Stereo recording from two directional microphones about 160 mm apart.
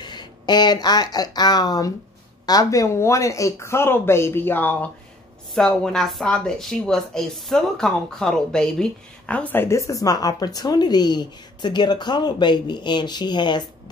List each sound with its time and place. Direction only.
0.0 s speech: 25° left (ahead or behind)